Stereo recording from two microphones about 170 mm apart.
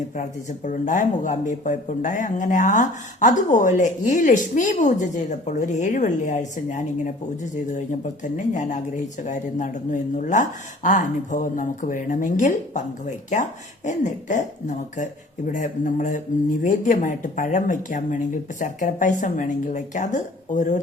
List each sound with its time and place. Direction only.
0.2 s speech: 45° left (ahead or behind)
8.2 s speech: 45° left (ahead or behind)